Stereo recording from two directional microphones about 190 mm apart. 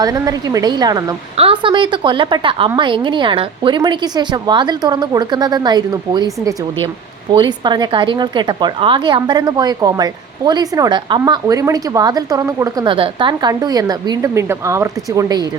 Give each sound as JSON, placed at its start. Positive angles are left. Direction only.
{"t": 0.0, "sound": "a woman's voice", "side_deg": -20}